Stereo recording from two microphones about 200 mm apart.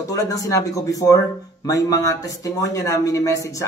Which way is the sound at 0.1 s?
15° left (ahead or behind).